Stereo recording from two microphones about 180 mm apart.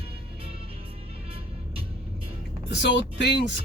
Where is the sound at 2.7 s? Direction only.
75° left (ahead or behind).